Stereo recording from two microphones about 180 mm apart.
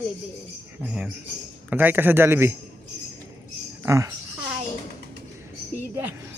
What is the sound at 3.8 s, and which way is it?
Speech, 15° right (ahead or behind).